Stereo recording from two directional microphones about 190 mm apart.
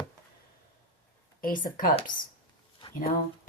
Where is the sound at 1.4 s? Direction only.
45° left (ahead or behind).